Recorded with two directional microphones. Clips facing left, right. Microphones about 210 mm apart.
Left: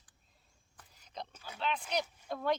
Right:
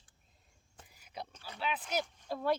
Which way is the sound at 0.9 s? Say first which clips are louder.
Even; 10° right (ahead or behind).